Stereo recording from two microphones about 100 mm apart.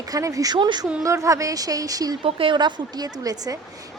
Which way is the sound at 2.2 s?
65° right (ahead or behind).